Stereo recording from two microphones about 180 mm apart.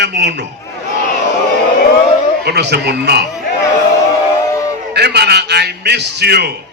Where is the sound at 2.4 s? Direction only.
65° right (ahead or behind).